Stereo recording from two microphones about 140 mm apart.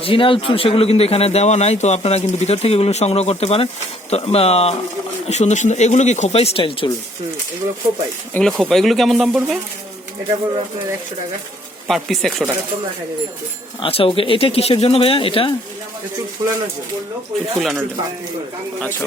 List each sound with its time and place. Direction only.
0.0 s a man's voice: 40° left (ahead or behind)
8.3 s speech: 5° left (ahead or behind)
11.9 s speech: centre (ahead or behind)
13.8 s speech: 40° left (ahead or behind)
16.4 s speech: 25° right (ahead or behind)
17.6 s speech: centre (ahead or behind)